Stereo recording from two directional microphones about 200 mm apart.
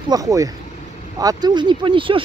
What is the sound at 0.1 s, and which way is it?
Speech, 15° right (ahead or behind).